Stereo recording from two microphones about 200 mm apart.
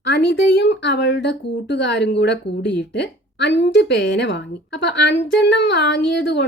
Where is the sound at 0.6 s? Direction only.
60° left (ahead or behind).